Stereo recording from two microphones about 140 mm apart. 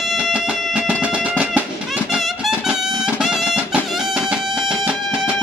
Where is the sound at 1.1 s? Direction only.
10° right (ahead or behind).